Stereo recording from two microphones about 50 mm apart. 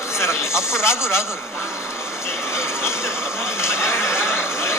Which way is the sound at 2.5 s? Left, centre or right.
Left.